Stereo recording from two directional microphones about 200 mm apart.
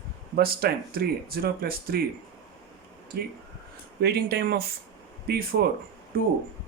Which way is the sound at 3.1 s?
50° right (ahead or behind).